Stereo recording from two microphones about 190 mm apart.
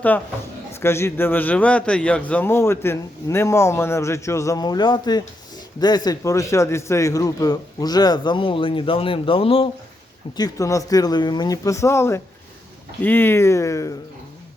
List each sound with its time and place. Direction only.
0.7 s a man's voice: 15° left (ahead or behind); by 9.6 s 30° left (ahead or behind)
10.3 s a man's voice: 20° left (ahead or behind)